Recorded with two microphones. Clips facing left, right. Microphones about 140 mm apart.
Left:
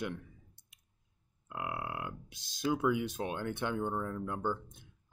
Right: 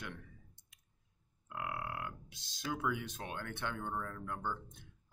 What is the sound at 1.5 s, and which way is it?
Speech, 20° left (ahead or behind).